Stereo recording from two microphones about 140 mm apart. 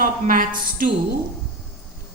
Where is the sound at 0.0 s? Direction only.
75° right (ahead or behind).